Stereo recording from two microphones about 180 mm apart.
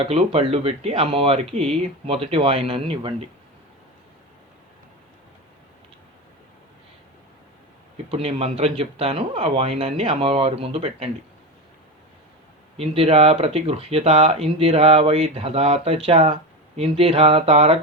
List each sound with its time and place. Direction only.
0.0 s speech: 35° right (ahead or behind)
8.1 s speech: 35° right (ahead or behind)
12.7 s speech: 35° right (ahead or behind)